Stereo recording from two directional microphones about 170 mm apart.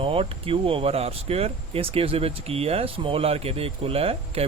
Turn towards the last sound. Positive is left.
turn(degrees=-35)  # may be behind; listen again after turning